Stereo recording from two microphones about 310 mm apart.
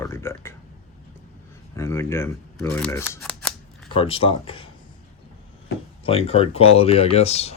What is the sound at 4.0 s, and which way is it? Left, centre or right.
Speech, centre.